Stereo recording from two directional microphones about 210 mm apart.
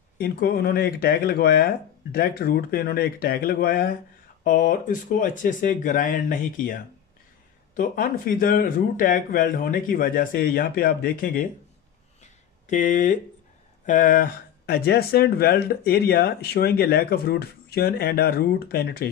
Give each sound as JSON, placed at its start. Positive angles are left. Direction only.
{"t": 0.2, "sound": "speech", "side_deg": 45}
{"t": 12.2, "sound": "a sound", "side_deg": 35}
{"t": 13.8, "sound": "speech", "side_deg": 40}